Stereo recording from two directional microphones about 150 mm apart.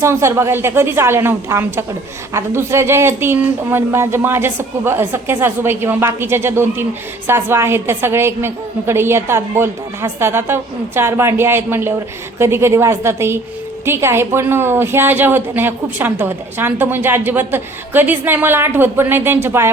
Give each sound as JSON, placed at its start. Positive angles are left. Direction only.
{"t": 0.0, "sound": "a woman's voice", "side_deg": -20}